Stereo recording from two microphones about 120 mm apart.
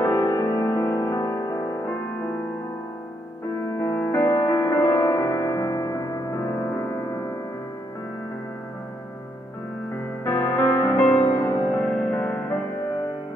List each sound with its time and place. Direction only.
0.0 s music: 15° left (ahead or behind)
0.3 s music: 35° left (ahead or behind)
3.8 s music: 20° left (ahead or behind)
10.2 s music: 20° left (ahead or behind)